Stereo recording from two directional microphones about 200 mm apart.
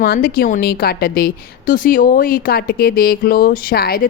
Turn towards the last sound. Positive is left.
turn(degrees=50)  # may be behind; listen again after turning